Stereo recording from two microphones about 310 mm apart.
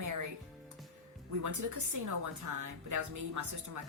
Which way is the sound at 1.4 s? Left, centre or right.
Right.